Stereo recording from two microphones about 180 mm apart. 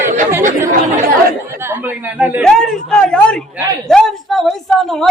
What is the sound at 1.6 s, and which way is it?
Speech, 10° right (ahead or behind).